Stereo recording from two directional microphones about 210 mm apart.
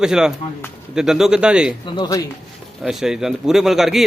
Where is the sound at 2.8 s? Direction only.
Centre (ahead or behind).